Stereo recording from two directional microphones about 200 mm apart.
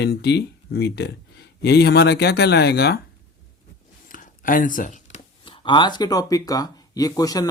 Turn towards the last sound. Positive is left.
turn(degrees=20)  # may be behind; listen again after turning